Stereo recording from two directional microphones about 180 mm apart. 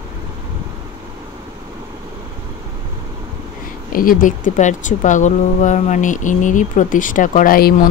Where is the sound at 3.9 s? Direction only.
50° left (ahead or behind).